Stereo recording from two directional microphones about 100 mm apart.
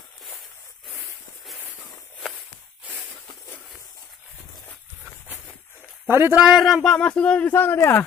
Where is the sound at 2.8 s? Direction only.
10° right (ahead or behind).